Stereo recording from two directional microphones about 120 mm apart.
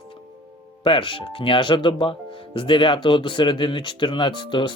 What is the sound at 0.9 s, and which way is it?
Speech, 45° left (ahead or behind).